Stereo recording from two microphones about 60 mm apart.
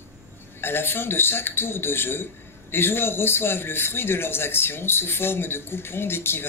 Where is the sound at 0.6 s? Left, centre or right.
Left.